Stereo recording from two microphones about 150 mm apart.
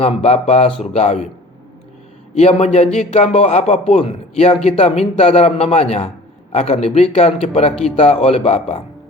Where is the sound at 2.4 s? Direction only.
45° left (ahead or behind).